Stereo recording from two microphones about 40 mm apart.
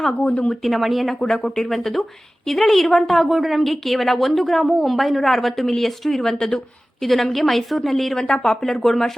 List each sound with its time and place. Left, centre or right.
0.2 s speech: left
0.6 s a woman's voice: centre
1.3 s a woman's voice: centre